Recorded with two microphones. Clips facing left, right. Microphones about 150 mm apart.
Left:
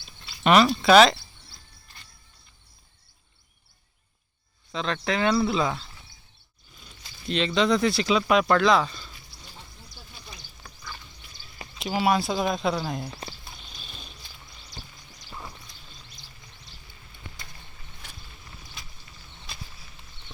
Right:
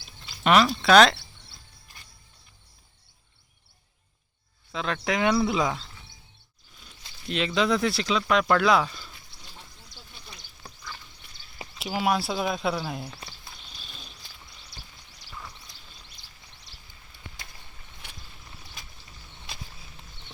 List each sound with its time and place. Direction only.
0.4 s a sound: centre (ahead or behind)
4.7 s speech: 5° right (ahead or behind)
6.8 s speech: 5° right (ahead or behind)
10.6 s pig: 30° right (ahead or behind)
11.8 s speech: centre (ahead or behind)
13.7 s a sound: centre (ahead or behind)
15.3 s music: 25° left (ahead or behind)